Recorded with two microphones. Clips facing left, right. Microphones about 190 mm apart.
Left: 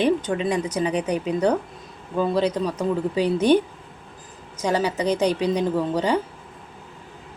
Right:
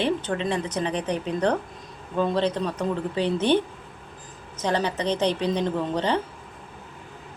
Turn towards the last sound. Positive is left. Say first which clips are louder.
# left 3 dB
turn(degrees=10)  # may be behind; listen again after turning